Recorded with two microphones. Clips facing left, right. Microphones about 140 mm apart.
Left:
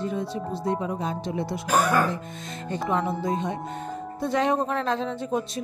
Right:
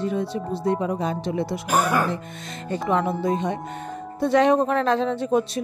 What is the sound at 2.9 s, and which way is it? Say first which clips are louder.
Speech: right 4 dB; 80° right.